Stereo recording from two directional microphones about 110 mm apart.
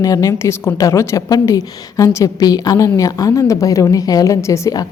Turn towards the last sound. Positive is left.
turn(degrees=30)  # may be behind; listen again after turning